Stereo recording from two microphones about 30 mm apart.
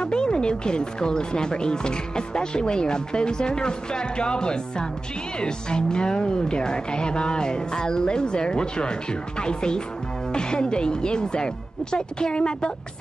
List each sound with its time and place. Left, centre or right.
0.0 s speech: left